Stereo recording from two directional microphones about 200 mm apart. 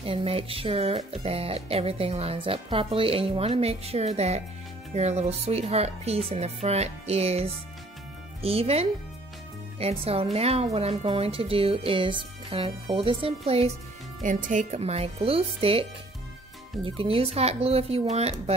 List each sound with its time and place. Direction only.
0.0 s a woman's voice: 30° right (ahead or behind)